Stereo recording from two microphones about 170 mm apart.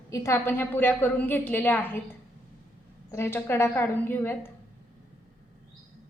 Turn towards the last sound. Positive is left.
turn(degrees=10)  # may be behind; listen again after turning